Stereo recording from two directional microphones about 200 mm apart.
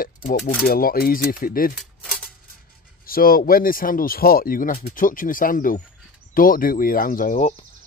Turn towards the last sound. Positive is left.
turn(degrees=40)  # may be behind; listen again after turning